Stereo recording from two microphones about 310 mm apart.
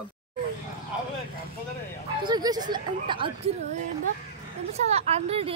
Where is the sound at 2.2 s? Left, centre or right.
Centre.